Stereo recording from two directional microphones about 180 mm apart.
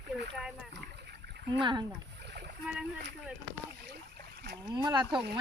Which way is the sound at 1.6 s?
25° right (ahead or behind).